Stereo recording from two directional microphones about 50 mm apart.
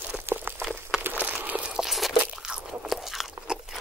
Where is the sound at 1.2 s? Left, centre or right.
Right.